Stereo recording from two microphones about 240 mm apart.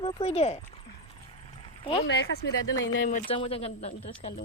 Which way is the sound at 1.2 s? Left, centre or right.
Left.